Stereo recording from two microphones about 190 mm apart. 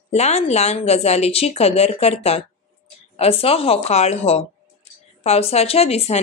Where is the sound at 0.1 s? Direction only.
35° left (ahead or behind).